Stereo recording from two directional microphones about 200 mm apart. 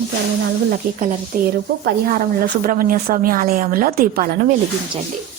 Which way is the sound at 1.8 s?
45° right (ahead or behind).